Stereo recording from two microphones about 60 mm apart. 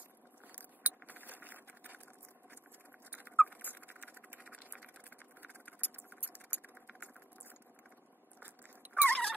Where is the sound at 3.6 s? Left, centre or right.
Right.